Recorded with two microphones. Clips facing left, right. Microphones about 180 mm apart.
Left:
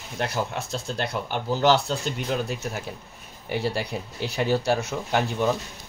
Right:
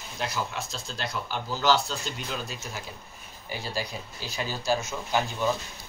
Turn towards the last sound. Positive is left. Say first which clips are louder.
# left 3 dB
turn(degrees=65)  # may be behind; listen again after turning